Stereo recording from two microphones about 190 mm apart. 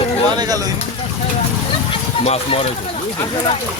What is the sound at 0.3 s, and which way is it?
Speech, 20° right (ahead or behind).